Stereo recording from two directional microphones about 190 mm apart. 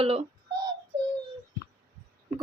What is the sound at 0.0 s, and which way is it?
Speech, 30° right (ahead or behind).